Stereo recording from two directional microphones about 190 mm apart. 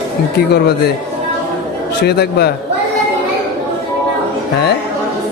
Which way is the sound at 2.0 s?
60° left (ahead or behind).